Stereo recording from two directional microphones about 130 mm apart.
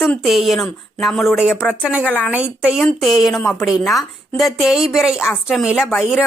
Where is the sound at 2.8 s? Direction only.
Centre (ahead or behind).